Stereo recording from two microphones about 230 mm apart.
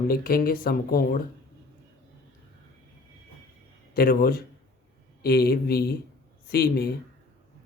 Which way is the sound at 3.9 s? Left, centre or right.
Left.